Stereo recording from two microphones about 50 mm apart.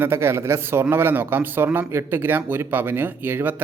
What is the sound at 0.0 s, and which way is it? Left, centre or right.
A man's voice, right.